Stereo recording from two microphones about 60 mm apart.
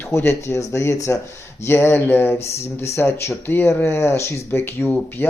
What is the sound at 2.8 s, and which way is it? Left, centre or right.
A man's voice, left.